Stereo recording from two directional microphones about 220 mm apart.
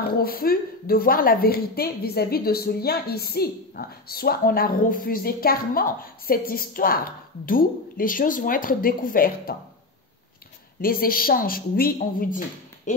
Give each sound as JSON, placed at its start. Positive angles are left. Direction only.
{"t": 0.2, "sound": "a woman's voice", "side_deg": 40}
{"t": 10.8, "sound": "speech", "side_deg": 40}